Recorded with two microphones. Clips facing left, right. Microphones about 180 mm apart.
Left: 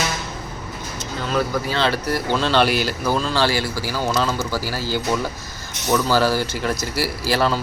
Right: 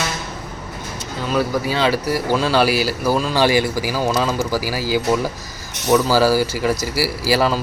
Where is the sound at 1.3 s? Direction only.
10° right (ahead or behind).